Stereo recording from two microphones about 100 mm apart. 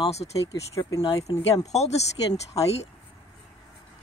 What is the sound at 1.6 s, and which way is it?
Speech, 90° left.